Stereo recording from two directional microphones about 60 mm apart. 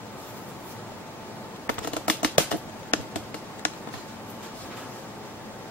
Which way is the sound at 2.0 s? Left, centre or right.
Left.